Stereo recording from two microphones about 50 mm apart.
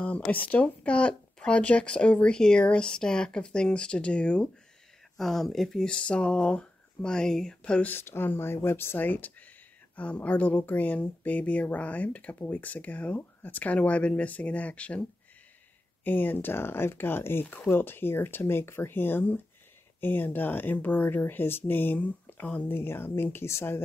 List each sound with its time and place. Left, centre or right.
0.0 s speech: left
5.1 s speech: centre
5.9 s speech: left
7.8 s speech: left
8.9 s speech: left
9.9 s speech: left
16.0 s speech: left
22.7 s speech: left